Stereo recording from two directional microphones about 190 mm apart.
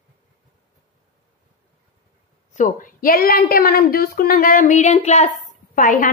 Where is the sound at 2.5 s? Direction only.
45° left (ahead or behind).